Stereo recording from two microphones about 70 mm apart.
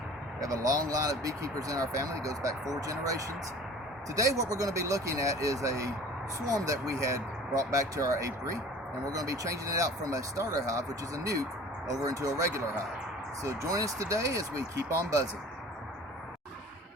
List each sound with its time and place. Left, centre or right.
0.3 s speech: right